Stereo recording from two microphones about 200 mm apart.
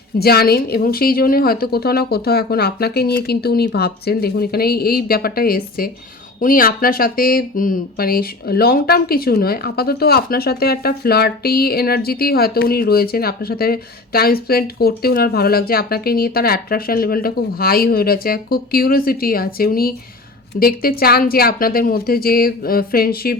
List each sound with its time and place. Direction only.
0.2 s speech: 50° left (ahead or behind)